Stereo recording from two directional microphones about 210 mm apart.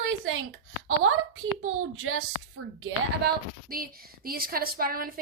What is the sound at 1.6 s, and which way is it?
Speech, 90° right.